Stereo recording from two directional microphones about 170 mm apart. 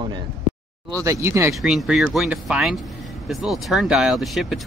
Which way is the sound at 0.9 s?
20° right (ahead or behind).